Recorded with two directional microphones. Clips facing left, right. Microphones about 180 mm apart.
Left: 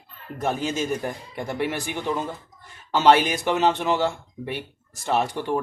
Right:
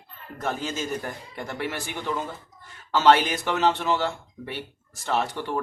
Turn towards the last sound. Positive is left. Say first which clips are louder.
# left 3 dB
turn(degrees=15)  # may be behind; listen again after turning